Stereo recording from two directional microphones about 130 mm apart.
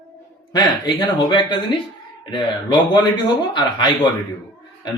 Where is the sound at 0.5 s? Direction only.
35° left (ahead or behind).